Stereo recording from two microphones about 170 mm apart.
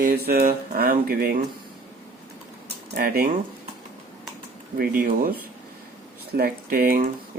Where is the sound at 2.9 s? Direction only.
60° right (ahead or behind).